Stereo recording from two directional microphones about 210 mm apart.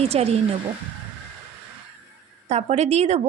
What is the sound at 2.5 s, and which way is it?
Speech, 30° right (ahead or behind).